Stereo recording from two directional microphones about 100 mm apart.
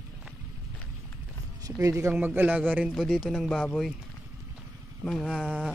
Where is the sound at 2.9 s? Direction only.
Centre (ahead or behind).